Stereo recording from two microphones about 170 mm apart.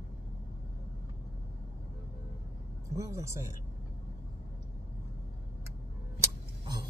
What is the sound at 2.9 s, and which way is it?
Speech, 20° right (ahead or behind).